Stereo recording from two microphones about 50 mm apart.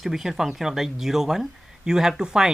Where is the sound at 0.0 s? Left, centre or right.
Centre.